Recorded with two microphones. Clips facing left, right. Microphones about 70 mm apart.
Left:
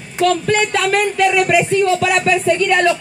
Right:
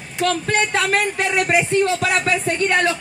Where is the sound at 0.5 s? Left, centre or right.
Right.